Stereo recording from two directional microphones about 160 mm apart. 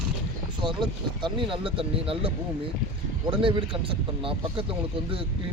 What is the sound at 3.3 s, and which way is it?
Speech, 30° right (ahead or behind).